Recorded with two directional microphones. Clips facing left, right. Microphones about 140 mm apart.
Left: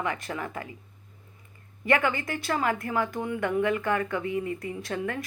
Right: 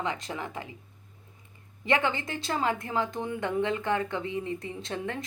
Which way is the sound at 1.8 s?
20° right (ahead or behind).